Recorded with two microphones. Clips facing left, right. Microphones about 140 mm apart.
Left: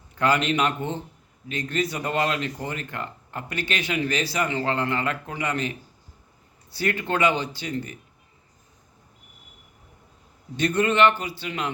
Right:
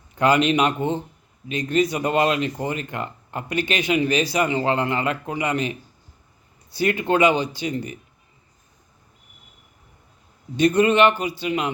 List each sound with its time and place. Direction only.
0.2 s speech: 15° right (ahead or behind)
6.7 s speech: 15° right (ahead or behind)
10.6 s speech: 15° right (ahead or behind)